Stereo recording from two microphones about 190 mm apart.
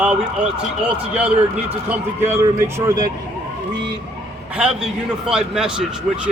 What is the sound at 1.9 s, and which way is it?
Speech, 15° right (ahead or behind).